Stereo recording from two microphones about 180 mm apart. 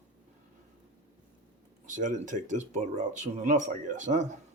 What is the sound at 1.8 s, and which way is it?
Speech, 45° right (ahead or behind).